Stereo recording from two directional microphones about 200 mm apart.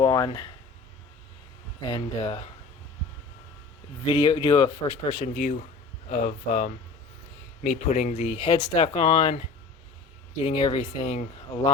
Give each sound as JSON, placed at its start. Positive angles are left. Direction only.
{"t": 0.0, "sound": "speech", "side_deg": 20}
{"t": 1.9, "sound": "speech", "side_deg": 25}
{"t": 4.0, "sound": "speech", "side_deg": 20}
{"t": 5.1, "sound": "speech", "side_deg": 40}
{"t": 10.4, "sound": "speech", "side_deg": 30}